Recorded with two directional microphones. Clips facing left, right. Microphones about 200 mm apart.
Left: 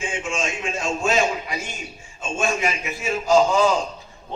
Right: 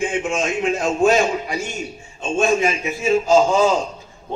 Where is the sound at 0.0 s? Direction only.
60° right (ahead or behind).